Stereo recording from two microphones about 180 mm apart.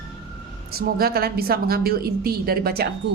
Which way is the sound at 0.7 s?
55° right (ahead or behind).